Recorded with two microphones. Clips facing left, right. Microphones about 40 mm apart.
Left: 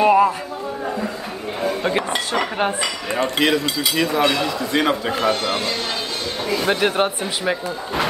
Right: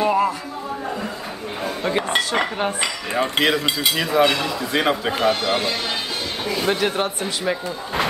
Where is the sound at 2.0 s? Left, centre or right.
Right.